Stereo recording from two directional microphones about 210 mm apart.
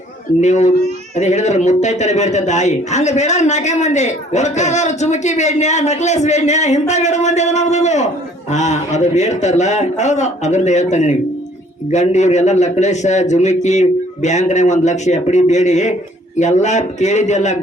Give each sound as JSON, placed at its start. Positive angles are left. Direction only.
{"t": 0.4, "sound": "a man's voice", "side_deg": 35}